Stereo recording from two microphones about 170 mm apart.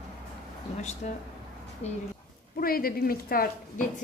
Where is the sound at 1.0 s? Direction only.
45° left (ahead or behind).